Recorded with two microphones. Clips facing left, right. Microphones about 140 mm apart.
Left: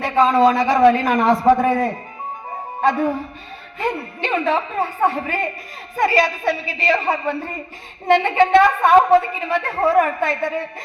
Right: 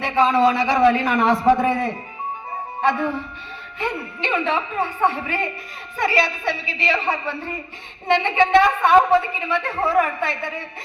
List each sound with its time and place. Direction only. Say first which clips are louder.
0.0 s a woman's voice: left 2 dB; 45° left (ahead or behind)